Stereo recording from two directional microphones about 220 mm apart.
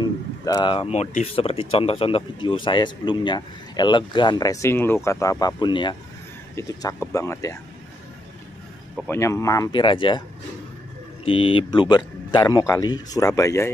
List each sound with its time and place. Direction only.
0.0 s speech: 20° left (ahead or behind)
8.9 s speech: 10° left (ahead or behind)
11.2 s speech: 25° left (ahead or behind)